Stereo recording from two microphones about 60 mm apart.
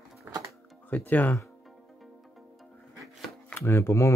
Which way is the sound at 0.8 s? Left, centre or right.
Left.